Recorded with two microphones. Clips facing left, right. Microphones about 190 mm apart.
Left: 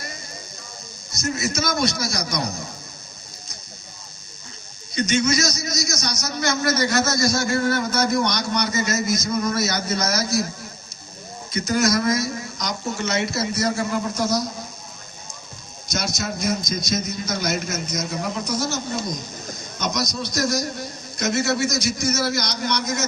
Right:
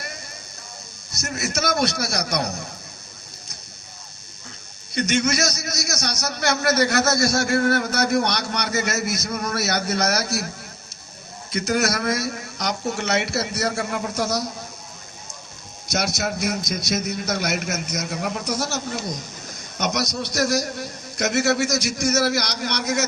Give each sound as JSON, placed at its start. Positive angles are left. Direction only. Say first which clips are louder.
{"t": 1.3, "sound": "a man's voice", "louder": "even", "side_deg": -60}
{"t": 4.9, "sound": "a man's voice", "louder": "left 1 dB", "side_deg": -60}
{"t": 11.5, "sound": "a man's voice", "louder": "left 2 dB", "side_deg": -65}
{"t": 15.9, "sound": "a man's voice", "louder": "right 2 dB", "side_deg": -65}